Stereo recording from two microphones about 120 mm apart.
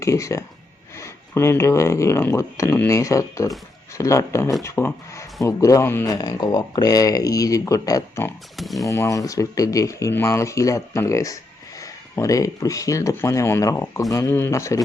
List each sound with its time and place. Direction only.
0.0 s speech: 25° left (ahead or behind)
6.1 s speech: 35° left (ahead or behind)
8.5 s speech: centre (ahead or behind)
8.8 s speech: 30° left (ahead or behind)